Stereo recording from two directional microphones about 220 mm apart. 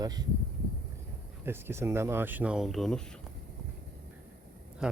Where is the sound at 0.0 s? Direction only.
20° right (ahead or behind).